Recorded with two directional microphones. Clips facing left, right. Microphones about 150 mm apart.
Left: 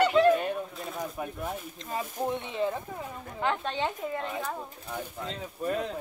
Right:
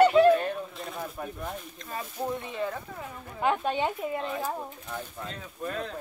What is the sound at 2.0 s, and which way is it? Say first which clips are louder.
Speech: even; 15° left (ahead or behind).